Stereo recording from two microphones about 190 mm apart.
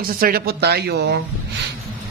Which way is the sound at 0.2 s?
55° right (ahead or behind).